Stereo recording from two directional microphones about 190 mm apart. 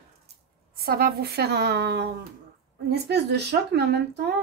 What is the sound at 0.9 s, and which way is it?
Speech, 55° right (ahead or behind).